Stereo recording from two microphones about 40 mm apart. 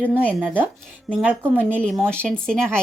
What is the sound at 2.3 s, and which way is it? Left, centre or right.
Speech, centre.